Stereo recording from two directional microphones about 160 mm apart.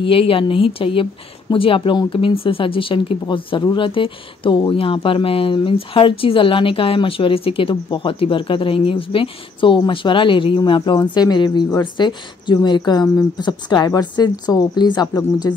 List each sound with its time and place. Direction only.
0.0 s speech: 35° left (ahead or behind)